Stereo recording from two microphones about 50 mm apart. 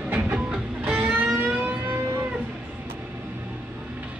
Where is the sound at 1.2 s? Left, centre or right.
Right.